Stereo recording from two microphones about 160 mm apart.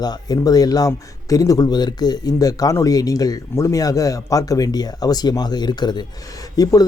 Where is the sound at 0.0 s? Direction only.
25° left (ahead or behind).